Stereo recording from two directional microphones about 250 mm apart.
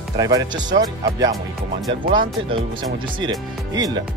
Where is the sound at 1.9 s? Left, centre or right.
Right.